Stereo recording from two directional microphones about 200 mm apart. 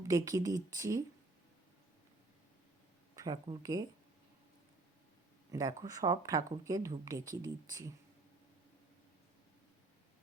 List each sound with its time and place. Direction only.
0.1 s speech: 20° right (ahead or behind)
3.2 s speech: 20° right (ahead or behind)
5.5 s speech: 20° right (ahead or behind)